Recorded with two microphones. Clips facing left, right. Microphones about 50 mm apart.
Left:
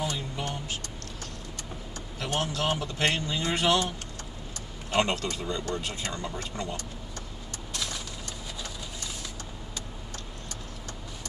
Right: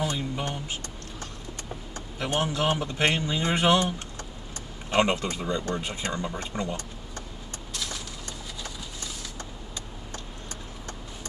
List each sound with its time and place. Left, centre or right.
0.0 s a sound: right
2.1 s a man's voice: right
4.9 s a man's voice: right